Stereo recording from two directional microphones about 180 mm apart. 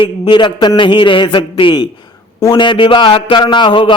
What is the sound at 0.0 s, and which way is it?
A man's voice, 25° left (ahead or behind).